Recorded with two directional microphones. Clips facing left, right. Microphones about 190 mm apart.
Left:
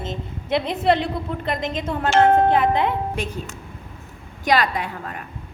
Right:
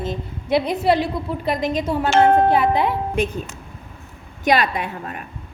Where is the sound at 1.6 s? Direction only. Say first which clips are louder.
Right 3 dB; 10° right (ahead or behind).